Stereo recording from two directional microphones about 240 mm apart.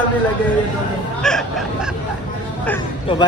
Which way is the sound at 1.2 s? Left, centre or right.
Centre.